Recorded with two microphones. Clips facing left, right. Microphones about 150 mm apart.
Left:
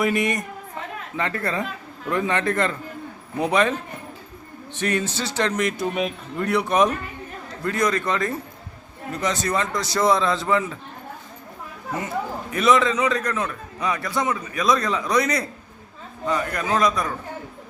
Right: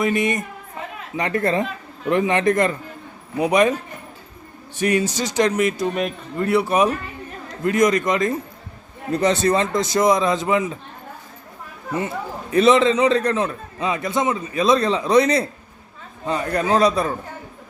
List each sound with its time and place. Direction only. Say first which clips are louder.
0.0 s a woman's voice: right 2 dB; centre (ahead or behind)
1.1 s a man's voice: right 6 dB; 15° right (ahead or behind)
7.4 s a man's voice: right 6 dB; 20° right (ahead or behind)
9.1 s a man's voice: right 6 dB; 30° right (ahead or behind)
11.9 s a man's voice: right 2 dB; 30° right (ahead or behind)